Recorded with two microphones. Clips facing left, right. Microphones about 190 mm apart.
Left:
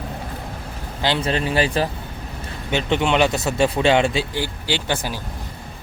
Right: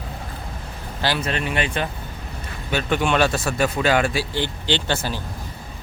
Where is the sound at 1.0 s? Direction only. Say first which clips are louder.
Left 3 dB; 25° left (ahead or behind).